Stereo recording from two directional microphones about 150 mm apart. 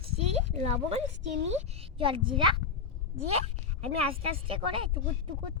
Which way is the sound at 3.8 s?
40° right (ahead or behind).